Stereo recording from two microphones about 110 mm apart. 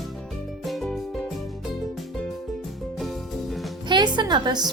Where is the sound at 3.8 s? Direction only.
40° right (ahead or behind).